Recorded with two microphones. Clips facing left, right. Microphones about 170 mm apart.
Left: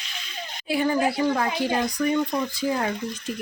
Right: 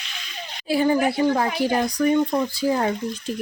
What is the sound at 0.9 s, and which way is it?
Speech, 20° right (ahead or behind).